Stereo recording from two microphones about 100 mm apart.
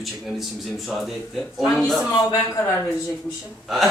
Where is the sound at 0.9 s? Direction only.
Centre (ahead or behind).